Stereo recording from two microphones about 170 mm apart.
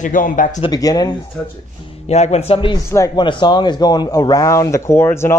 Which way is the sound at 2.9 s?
15° left (ahead or behind).